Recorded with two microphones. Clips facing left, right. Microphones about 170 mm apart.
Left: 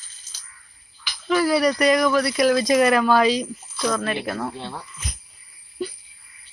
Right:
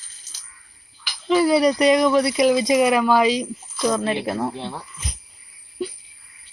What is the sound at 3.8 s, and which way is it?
Speech, 25° right (ahead or behind).